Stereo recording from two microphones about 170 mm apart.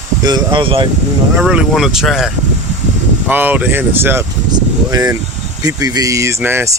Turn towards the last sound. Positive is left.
turn(degrees=-15)  # may be behind; listen again after turning